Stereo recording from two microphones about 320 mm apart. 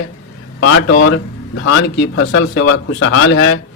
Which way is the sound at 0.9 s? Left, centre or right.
Left.